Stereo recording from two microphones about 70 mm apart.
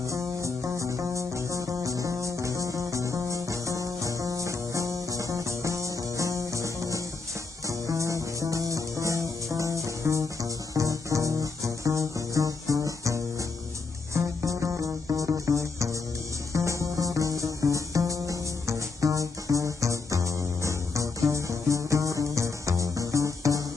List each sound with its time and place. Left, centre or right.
0.1 s music: right